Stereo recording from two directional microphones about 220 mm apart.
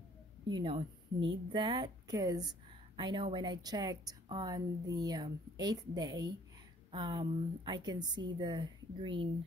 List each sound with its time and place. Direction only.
0.5 s speech: 25° right (ahead or behind)